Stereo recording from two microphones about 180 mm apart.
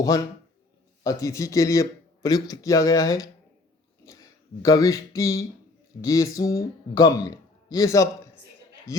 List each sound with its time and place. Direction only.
1.0 s speech: 15° left (ahead or behind)
6.0 s a sound: 20° left (ahead or behind)
6.6 s speech: 20° left (ahead or behind)